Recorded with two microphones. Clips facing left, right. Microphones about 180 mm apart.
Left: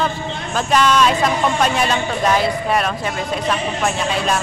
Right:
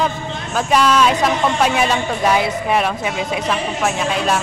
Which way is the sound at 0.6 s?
10° right (ahead or behind).